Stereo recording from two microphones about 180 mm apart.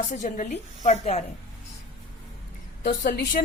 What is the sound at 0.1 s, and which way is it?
A woman's voice, 45° left (ahead or behind).